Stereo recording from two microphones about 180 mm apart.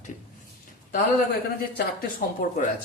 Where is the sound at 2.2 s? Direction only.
55° left (ahead or behind).